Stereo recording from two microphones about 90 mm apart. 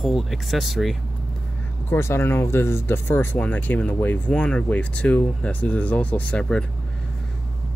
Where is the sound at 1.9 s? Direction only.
25° left (ahead or behind); by 6.6 s 10° left (ahead or behind).